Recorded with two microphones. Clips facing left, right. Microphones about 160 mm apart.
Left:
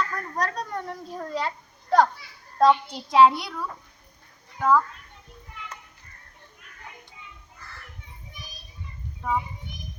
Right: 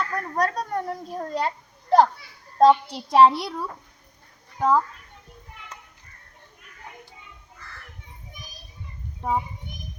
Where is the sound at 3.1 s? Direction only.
35° right (ahead or behind).